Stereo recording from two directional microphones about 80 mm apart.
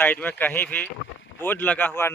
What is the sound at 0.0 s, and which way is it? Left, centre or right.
Speech, left.